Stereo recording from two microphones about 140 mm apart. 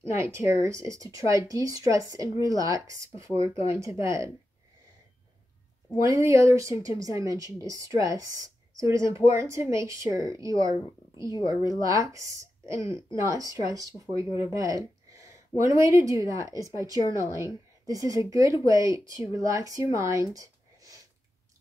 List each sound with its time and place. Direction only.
0.0 s a woman's voice: 20° right (ahead or behind)
6.0 s a woman's voice: 20° right (ahead or behind)
20.3 s a sound: 25° right (ahead or behind)